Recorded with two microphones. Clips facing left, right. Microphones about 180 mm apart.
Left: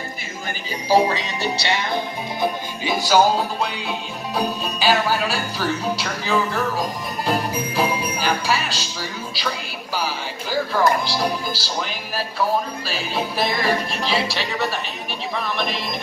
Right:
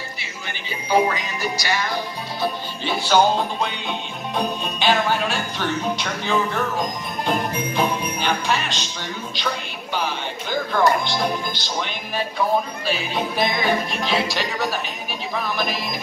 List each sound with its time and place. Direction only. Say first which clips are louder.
0.8 s music: left 2 dB; 35° left (ahead or behind)
2.4 s music: left 1 dB; 10° left (ahead or behind)
4.4 s jingle bell: left 1 dB; 5° left (ahead or behind)